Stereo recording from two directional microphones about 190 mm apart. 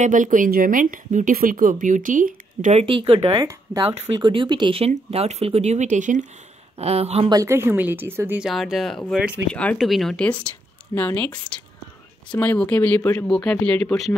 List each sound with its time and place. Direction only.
0.0 s speech: 40° right (ahead or behind)
2.8 s speech: 30° right (ahead or behind)
7.3 s speech: 15° right (ahead or behind); by 14.1 s 5° left (ahead or behind)